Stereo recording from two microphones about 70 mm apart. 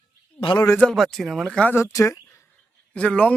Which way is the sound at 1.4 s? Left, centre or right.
Centre.